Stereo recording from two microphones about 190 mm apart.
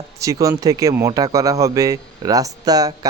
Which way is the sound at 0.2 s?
15° right (ahead or behind).